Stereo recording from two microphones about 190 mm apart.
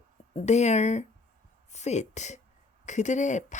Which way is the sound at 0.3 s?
35° left (ahead or behind).